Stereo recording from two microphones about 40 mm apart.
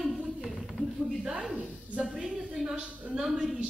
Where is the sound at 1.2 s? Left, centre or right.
Right.